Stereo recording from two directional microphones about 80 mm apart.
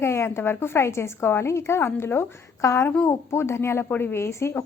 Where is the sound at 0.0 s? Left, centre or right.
Left.